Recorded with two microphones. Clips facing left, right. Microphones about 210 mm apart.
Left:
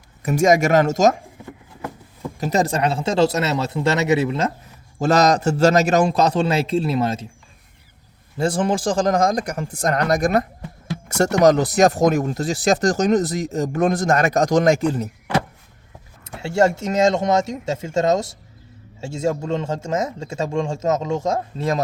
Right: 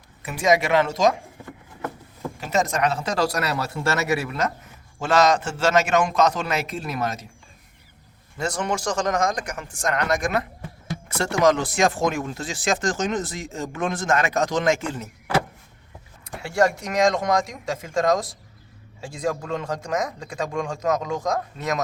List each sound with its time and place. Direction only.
0.2 s speech: 45° left (ahead or behind)
2.4 s speech: 35° left (ahead or behind)
4.9 s speech: 40° left (ahead or behind)
8.4 s speech: 30° left (ahead or behind)
16.2 s speech: 25° left (ahead or behind)